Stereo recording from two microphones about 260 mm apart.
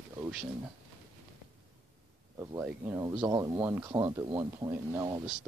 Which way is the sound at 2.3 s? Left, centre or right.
Centre.